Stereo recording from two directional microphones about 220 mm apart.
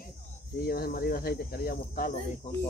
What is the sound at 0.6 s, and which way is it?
Speech, 45° left (ahead or behind).